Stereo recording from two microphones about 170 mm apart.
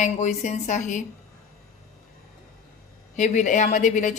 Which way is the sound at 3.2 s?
45° left (ahead or behind).